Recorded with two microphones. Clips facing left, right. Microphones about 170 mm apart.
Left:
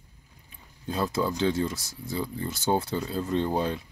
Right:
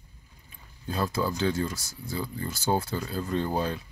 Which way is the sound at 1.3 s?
20° left (ahead or behind).